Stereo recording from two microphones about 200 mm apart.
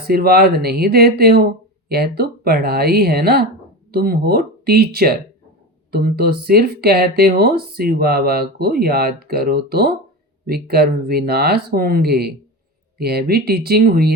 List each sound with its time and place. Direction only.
0.1 s speech: 50° right (ahead or behind)